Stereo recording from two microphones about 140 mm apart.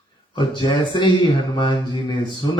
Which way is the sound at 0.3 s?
35° left (ahead or behind).